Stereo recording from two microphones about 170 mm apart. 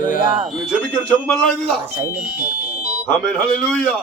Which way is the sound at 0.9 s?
10° left (ahead or behind).